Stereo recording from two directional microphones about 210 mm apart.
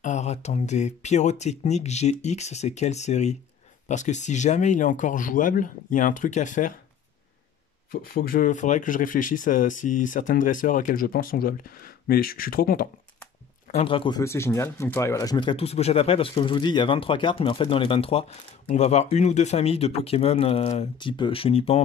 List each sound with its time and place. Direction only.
0.0 s speech: 35° left (ahead or behind)
7.9 s speech: 45° left (ahead or behind)
13.8 s speech: 25° left (ahead or behind)